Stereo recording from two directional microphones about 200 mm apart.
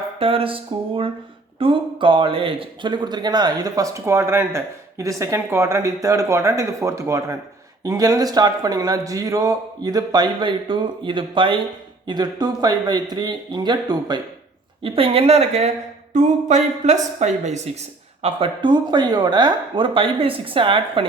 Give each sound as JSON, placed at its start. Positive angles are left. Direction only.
{"t": 0.2, "sound": "a man's voice", "side_deg": -25}
{"t": 16.1, "sound": "a sound", "side_deg": -35}
{"t": 18.2, "sound": "a man's voice", "side_deg": -30}